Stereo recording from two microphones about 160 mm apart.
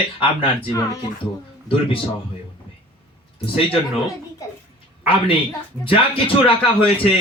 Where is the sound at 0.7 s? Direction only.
20° left (ahead or behind).